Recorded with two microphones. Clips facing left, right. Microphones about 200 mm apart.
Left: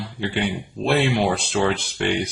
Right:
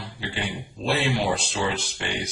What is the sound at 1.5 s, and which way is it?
Speech, 60° left (ahead or behind).